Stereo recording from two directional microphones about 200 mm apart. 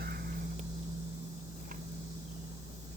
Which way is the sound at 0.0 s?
50° right (ahead or behind).